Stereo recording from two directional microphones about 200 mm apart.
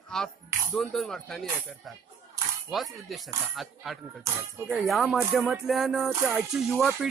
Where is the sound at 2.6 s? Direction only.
Centre (ahead or behind).